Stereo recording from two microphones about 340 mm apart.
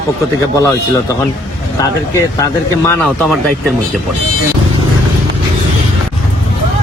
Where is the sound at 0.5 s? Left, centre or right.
Centre.